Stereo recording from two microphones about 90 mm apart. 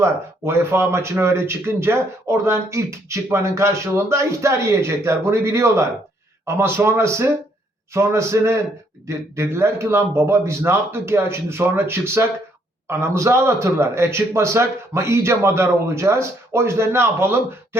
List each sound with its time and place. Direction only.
0.0 s speech: 30° right (ahead or behind)